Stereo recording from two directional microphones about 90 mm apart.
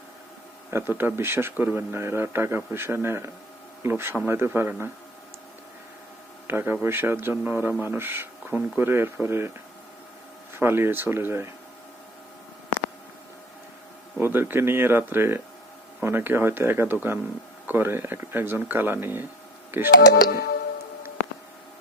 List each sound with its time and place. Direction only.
0.7 s a man's voice: 25° right (ahead or behind)
6.5 s a man's voice: 25° right (ahead or behind)
10.6 s a man's voice: 25° right (ahead or behind)
14.2 s a man's voice: 25° right (ahead or behind)